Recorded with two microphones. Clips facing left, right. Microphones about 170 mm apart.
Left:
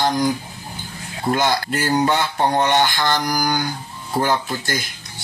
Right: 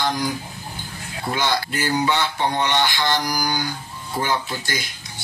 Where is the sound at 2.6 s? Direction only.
50° left (ahead or behind).